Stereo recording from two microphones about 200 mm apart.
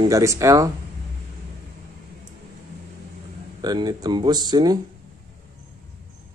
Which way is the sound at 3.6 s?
20° right (ahead or behind).